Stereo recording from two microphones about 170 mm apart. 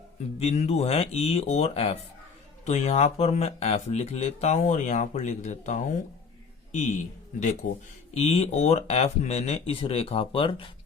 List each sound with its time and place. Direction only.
0.3 s a man's voice: 40° left (ahead or behind)